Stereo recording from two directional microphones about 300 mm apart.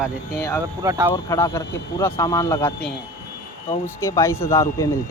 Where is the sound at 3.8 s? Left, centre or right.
Centre.